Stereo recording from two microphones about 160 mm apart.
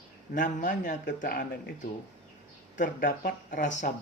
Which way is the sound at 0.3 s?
55° left (ahead or behind).